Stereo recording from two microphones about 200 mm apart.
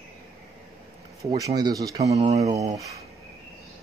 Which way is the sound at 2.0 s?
35° right (ahead or behind).